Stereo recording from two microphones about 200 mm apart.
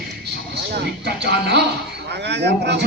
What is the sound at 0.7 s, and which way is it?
Speech, 55° right (ahead or behind).